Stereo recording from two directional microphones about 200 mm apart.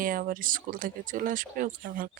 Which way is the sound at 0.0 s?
45° right (ahead or behind).